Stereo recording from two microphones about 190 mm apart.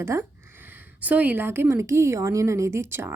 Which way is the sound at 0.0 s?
15° right (ahead or behind).